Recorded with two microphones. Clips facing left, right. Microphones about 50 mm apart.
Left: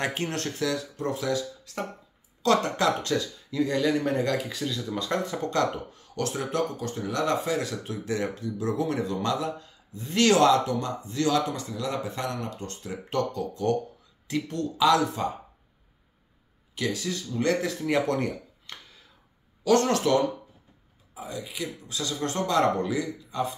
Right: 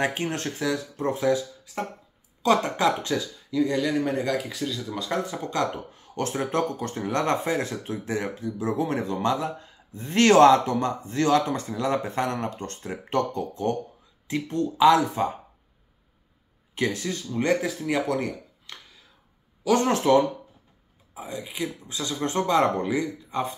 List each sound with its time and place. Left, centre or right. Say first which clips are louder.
0.0 s speech: right 3 dB; centre
2.4 s speech: right 1 dB; centre
3.4 s speech: right 1 dB; centre
5.9 s speech: right 1 dB; right
6.8 s speech: right 2 dB; right
9.9 s speech: right 4 dB; right
16.7 s speech: right 2 dB; right
17.6 s speech: even; centre
19.6 s speech: even; centre; by 23.5 s right